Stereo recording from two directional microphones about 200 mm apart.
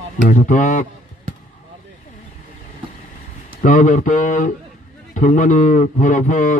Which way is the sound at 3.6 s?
40° left (ahead or behind).